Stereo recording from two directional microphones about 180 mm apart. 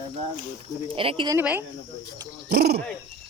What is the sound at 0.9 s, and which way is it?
Speech, 30° right (ahead or behind).